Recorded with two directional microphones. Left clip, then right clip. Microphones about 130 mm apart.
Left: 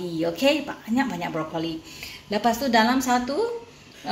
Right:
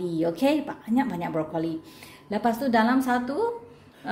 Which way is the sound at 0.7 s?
20° right (ahead or behind).